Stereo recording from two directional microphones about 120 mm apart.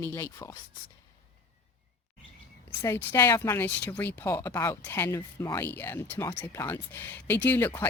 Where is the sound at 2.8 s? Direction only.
30° left (ahead or behind).